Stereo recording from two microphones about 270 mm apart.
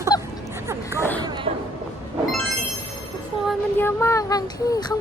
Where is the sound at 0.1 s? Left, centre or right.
Centre.